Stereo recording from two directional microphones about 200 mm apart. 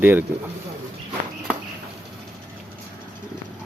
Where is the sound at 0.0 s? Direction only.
10° right (ahead or behind).